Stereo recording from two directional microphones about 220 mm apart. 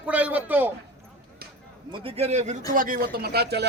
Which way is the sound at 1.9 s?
25° right (ahead or behind).